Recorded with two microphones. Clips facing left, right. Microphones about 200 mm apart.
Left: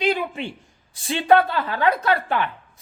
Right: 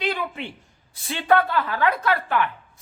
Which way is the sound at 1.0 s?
25° left (ahead or behind).